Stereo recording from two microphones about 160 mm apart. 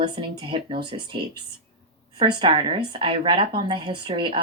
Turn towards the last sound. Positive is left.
turn(degrees=-30)  # may be behind; listen again after turning